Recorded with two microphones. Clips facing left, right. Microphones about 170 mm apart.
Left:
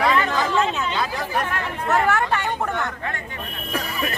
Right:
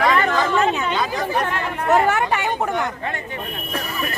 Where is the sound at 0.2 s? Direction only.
55° right (ahead or behind).